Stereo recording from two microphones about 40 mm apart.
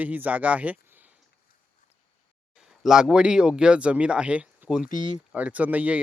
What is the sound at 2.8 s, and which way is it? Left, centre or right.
Speech, centre.